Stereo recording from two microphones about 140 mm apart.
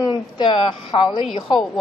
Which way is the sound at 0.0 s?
35° left (ahead or behind).